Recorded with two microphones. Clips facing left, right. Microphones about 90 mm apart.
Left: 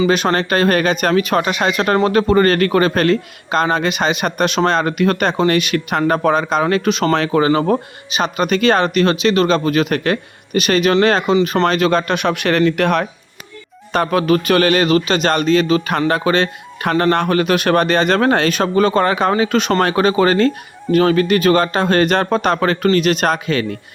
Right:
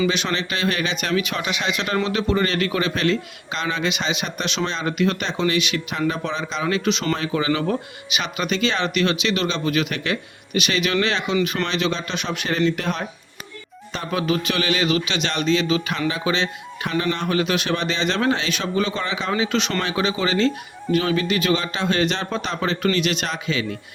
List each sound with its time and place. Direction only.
0.1 s speech: 45° left (ahead or behind)
7.1 s speech: 70° left (ahead or behind)
7.4 s speech: 40° left (ahead or behind)